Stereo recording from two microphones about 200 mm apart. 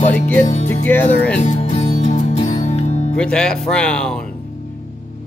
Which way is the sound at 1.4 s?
35° left (ahead or behind).